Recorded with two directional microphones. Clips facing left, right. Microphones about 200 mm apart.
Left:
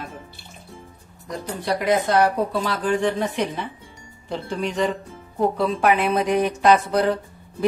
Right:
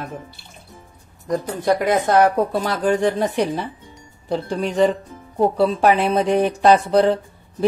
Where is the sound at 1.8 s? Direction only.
45° right (ahead or behind).